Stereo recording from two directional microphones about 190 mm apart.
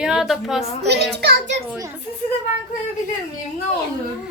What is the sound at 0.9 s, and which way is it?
Speech, 60° right (ahead or behind).